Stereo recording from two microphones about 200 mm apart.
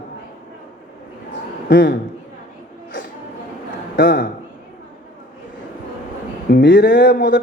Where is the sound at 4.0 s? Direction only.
55° left (ahead or behind).